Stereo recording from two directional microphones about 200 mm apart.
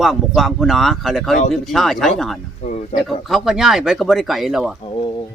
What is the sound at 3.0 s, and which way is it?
A man's voice, centre (ahead or behind).